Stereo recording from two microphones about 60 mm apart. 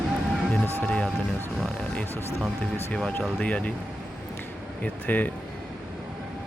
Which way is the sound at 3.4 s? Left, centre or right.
Left.